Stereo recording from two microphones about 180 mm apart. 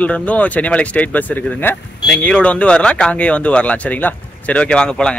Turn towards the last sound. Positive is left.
turn(degrees=5)  # may be behind; listen again after turning